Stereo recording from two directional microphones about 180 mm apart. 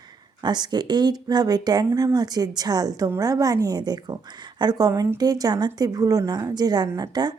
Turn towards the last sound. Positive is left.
turn(degrees=-20)  # may be behind; listen again after turning